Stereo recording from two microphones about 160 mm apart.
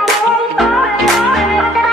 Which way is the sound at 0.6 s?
Centre (ahead or behind).